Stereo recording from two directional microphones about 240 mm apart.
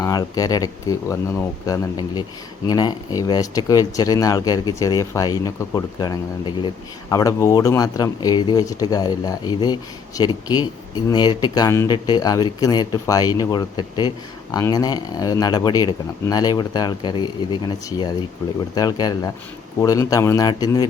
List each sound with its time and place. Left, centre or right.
0.0 s speech: centre